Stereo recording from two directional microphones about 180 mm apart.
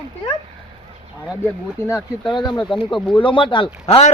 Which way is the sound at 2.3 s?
25° left (ahead or behind).